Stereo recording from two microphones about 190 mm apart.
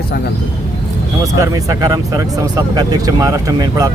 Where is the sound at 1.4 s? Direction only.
15° right (ahead or behind).